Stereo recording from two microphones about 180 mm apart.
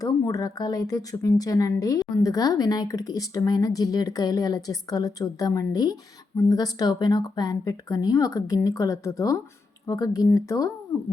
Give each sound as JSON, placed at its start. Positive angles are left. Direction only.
{"t": 0.0, "sound": "speech", "side_deg": 20}